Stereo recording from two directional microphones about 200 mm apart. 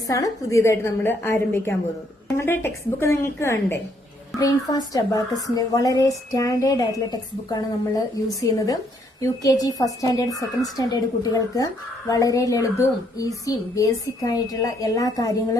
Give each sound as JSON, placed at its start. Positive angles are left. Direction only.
{"t": 0.1, "sound": "a woman's voice", "side_deg": 15}